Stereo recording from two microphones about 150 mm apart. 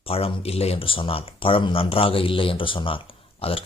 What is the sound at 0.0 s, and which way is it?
Speech, 40° left (ahead or behind).